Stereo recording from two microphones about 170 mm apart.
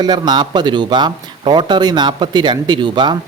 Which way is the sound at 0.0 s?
25° right (ahead or behind).